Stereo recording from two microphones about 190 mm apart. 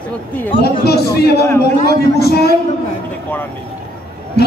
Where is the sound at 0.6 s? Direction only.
55° left (ahead or behind).